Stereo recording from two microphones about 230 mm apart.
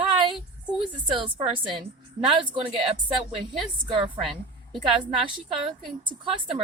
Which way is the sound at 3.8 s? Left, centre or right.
Right.